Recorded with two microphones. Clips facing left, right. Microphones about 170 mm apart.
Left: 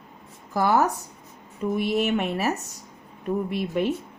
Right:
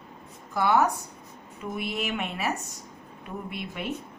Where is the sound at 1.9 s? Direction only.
40° left (ahead or behind).